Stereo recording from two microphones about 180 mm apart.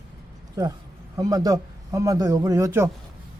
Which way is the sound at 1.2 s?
20° right (ahead or behind).